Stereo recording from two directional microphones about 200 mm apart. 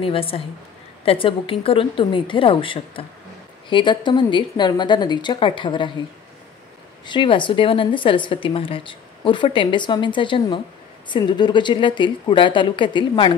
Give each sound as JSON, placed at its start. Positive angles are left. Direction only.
{"t": 0.0, "sound": "a woman's voice", "side_deg": 25}
{"t": 7.1, "sound": "a woman's voice", "side_deg": 25}